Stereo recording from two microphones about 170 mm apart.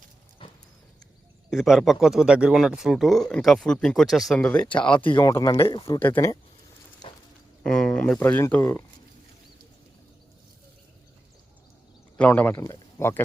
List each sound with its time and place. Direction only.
1.5 s speech: centre (ahead or behind)
5.1 s speech: 20° left (ahead or behind)
6.0 s speech: 10° left (ahead or behind)
7.6 s speech: 5° left (ahead or behind)
12.1 s speech: 10° left (ahead or behind)